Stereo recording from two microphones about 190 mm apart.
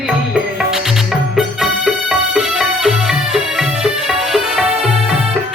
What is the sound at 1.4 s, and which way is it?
Music, centre (ahead or behind).